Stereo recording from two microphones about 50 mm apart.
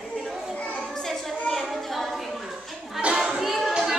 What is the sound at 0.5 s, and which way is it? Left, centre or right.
Children playing, centre.